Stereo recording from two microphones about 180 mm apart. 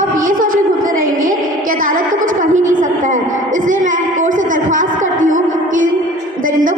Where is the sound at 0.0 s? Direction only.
50° right (ahead or behind).